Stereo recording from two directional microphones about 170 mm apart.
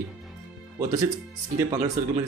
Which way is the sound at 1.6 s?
20° right (ahead or behind).